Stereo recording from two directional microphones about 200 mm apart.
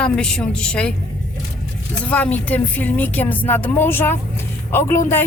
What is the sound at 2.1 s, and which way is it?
Speech, 5° left (ahead or behind).